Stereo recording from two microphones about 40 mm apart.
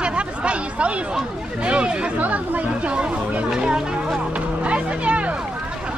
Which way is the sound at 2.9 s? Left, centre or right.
Right.